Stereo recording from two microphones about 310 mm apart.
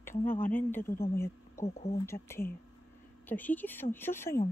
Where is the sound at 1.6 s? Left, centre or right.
Centre.